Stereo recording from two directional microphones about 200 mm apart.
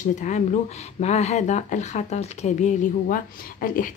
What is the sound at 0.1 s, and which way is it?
Speech, 35° left (ahead or behind).